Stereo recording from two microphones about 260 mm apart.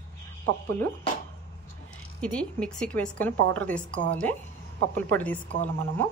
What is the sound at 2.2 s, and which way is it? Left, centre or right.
A woman's voice, centre.